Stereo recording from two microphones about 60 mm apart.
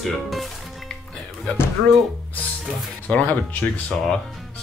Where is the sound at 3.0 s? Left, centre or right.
Left.